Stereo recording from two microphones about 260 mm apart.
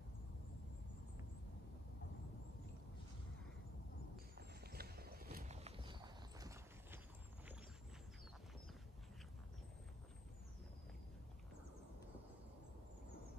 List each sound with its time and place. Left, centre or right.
4.4 s horse: right
5.6 s clip-clop: right